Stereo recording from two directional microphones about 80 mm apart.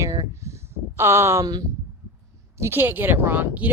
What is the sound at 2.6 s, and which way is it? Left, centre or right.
Speech, right.